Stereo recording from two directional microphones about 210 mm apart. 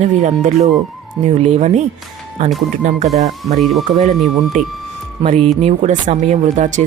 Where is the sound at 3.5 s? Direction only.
Centre (ahead or behind).